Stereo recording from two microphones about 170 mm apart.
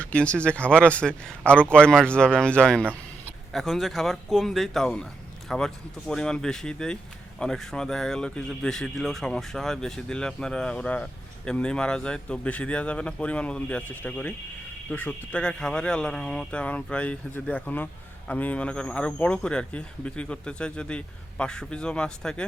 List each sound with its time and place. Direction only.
0.0 s speech: 5° left (ahead or behind)